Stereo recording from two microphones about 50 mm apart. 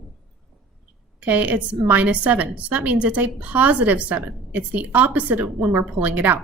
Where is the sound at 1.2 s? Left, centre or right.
Right.